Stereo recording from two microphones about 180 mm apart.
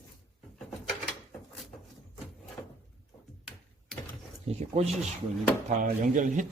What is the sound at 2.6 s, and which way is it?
Drawer open or close, 10° left (ahead or behind).